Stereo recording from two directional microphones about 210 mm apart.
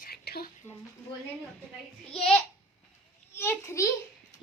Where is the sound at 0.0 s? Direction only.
45° left (ahead or behind).